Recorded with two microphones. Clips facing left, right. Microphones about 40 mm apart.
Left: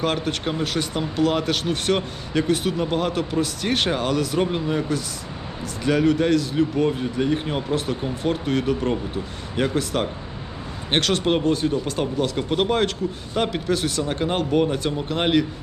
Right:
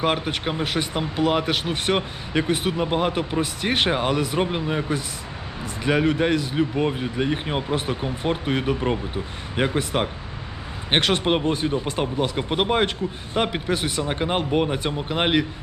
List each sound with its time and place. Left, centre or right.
0.0 s speech: centre